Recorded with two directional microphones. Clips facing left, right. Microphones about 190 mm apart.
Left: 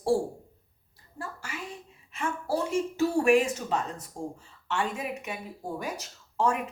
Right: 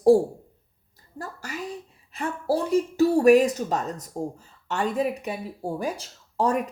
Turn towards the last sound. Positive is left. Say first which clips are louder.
# right 4 dB
turn(degrees=-35)  # may be behind; listen again after turning